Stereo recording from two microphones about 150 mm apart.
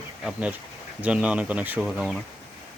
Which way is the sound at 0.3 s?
10° right (ahead or behind).